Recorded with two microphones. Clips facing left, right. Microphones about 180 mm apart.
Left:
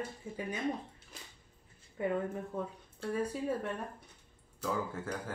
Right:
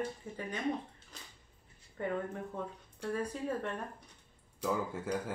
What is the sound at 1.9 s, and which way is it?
Speech, 5° left (ahead or behind).